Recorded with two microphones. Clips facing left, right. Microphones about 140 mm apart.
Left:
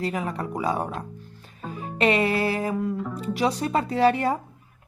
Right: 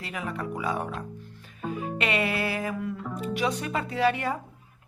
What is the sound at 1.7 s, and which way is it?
Music, 35° left (ahead or behind).